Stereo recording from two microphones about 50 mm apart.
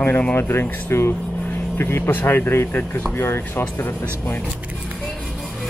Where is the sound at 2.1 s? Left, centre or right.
Left.